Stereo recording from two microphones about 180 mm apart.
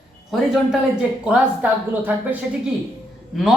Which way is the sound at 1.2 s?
5° right (ahead or behind).